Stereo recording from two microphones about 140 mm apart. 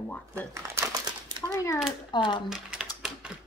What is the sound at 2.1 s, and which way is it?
Speech, 35° left (ahead or behind).